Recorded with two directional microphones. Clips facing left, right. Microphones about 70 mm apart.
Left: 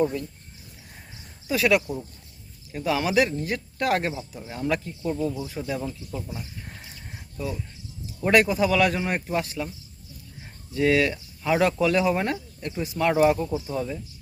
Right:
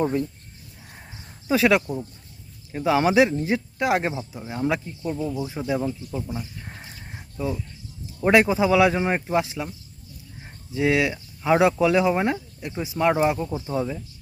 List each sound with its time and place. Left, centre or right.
0.0 s speech: right
1.5 s speech: right
5.3 s speech: right
6.7 s a sound: right
8.0 s speech: right
10.8 s speech: centre
13.5 s speech: right
13.7 s speech: centre